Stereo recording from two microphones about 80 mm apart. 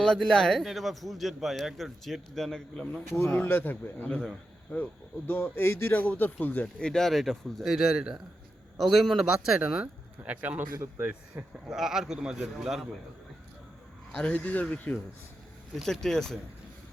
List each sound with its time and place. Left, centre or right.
0.0 s a man's voice: centre
3.4 s a man's voice: left; by 11.5 s right
11.7 s a man's voice: centre
14.1 s speech: centre
15.7 s a man's voice: centre